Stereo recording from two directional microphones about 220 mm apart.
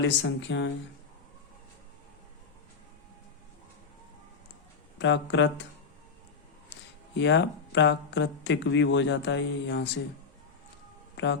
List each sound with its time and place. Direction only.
0.0 s speech: 55° left (ahead or behind)
4.9 s speech: 55° left (ahead or behind)
7.2 s speech: 55° left (ahead or behind)